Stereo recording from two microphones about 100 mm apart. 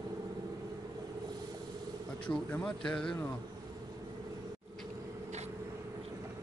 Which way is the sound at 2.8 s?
10° left (ahead or behind).